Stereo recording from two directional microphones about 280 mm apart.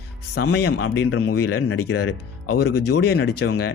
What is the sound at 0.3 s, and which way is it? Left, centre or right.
Speech, left.